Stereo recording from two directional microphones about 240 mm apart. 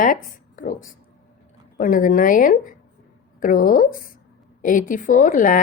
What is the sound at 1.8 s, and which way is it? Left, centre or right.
A woman's voice, left.